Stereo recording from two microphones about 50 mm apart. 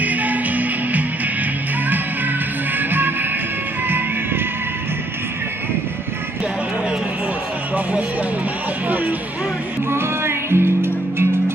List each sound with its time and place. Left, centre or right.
0.0 s music: right
2.8 s music: right
8.8 s speech: right
9.8 s music: right